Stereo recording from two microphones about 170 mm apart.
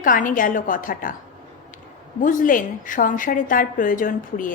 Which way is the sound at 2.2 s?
50° left (ahead or behind).